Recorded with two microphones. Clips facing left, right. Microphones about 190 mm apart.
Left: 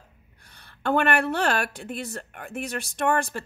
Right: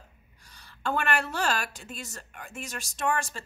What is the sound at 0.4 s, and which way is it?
A woman's voice, 60° left (ahead or behind).